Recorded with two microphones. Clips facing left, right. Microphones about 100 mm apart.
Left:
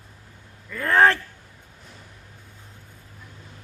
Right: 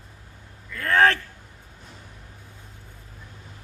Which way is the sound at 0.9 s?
30° left (ahead or behind).